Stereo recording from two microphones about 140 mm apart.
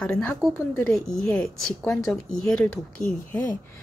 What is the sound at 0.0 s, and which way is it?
Speech, 10° left (ahead or behind).